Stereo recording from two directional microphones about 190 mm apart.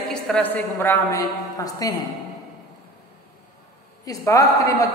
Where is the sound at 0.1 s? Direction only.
5° left (ahead or behind).